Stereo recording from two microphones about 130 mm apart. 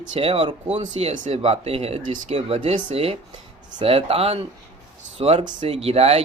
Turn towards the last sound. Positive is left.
turn(degrees=-50)  # may be behind; listen again after turning